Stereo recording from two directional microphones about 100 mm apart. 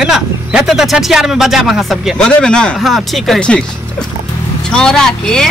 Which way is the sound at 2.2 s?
10° left (ahead or behind).